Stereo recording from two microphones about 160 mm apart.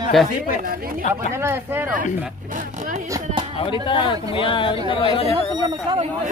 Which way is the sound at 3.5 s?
30° left (ahead or behind).